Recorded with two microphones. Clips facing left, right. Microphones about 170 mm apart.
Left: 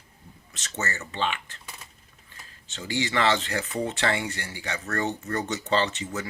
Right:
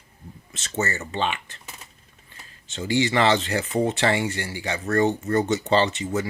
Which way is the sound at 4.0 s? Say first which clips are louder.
Right 5 dB; 15° right (ahead or behind).